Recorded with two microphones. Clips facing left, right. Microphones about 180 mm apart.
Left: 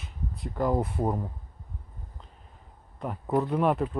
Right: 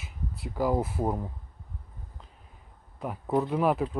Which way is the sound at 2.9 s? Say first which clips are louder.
Even; 5° right (ahead or behind).